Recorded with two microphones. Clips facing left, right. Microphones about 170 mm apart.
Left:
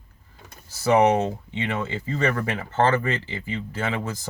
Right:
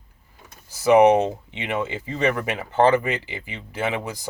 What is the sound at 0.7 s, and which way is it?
Speech, 15° right (ahead or behind).